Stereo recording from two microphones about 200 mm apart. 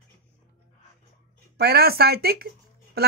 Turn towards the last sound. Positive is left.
turn(degrees=-50)  # may be behind; listen again after turning